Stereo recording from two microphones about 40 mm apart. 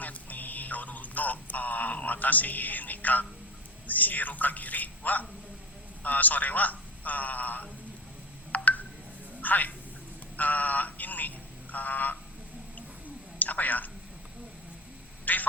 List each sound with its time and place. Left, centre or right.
0.0 s a sound: left
3.8 s a woman's voice: left
8.5 s telephone dialing: left
9.4 s a woman's voice: left
13.4 s a woman's voice: left
15.2 s a sound: left